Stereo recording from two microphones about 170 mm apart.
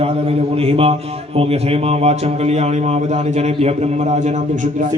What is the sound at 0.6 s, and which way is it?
A man's voice, 35° right (ahead or behind).